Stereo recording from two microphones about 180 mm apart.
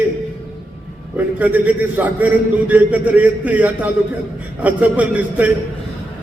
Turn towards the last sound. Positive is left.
turn(degrees=-10)  # may be behind; listen again after turning